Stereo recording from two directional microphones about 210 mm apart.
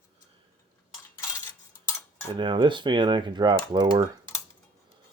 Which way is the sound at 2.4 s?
20° right (ahead or behind).